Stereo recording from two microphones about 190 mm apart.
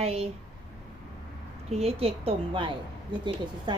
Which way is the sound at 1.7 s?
30° right (ahead or behind).